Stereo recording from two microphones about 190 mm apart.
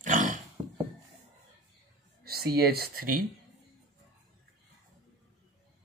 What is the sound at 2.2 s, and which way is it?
Speech, 55° right (ahead or behind).